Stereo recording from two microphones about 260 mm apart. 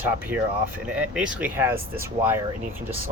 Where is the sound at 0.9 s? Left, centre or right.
Centre.